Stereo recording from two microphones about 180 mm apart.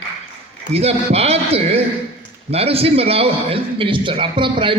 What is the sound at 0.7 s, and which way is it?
A man's voice, 35° right (ahead or behind).